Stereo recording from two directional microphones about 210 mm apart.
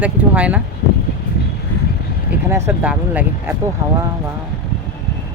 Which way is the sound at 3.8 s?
20° right (ahead or behind).